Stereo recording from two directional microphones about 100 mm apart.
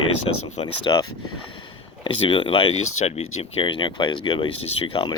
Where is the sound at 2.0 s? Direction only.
60° left (ahead or behind).